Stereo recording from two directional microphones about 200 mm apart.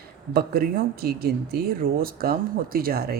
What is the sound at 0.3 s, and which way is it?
Speech, 50° right (ahead or behind).